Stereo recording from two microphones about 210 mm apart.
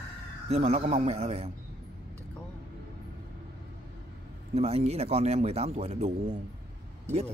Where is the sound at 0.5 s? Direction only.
30° right (ahead or behind).